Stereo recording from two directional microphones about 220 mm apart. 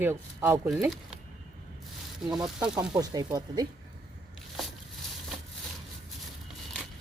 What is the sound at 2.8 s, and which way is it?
Speech, 20° right (ahead or behind).